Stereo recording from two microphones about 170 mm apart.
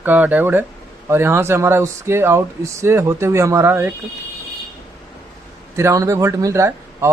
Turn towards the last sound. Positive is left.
turn(degrees=-15)  # may be behind; listen again after turning